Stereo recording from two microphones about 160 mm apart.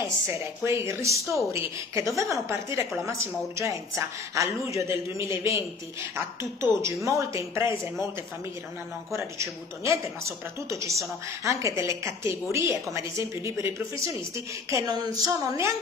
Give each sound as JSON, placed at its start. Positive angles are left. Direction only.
{"t": 0.0, "sound": "speech", "side_deg": -15}
{"t": 9.1, "sound": "speech", "side_deg": -15}